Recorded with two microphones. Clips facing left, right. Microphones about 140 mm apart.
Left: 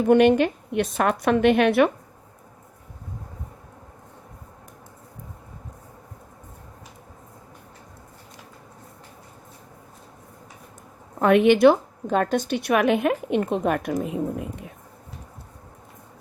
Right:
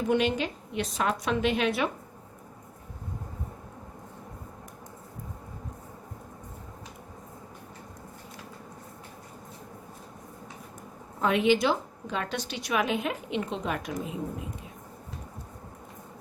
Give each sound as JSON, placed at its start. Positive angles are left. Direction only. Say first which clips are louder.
{"t": 0.1, "sound": "a woman's voice", "louder": "left 11 dB", "side_deg": 60}
{"t": 11.2, "sound": "a woman's voice", "louder": "left 8 dB", "side_deg": 60}